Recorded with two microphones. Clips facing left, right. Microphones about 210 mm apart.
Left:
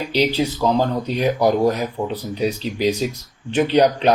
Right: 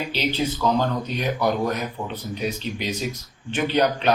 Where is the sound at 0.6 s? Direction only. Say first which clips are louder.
Left 3 dB; 30° left (ahead or behind).